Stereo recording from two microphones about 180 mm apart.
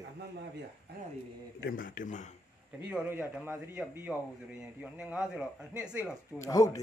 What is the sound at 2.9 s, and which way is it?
A man's voice, 10° right (ahead or behind).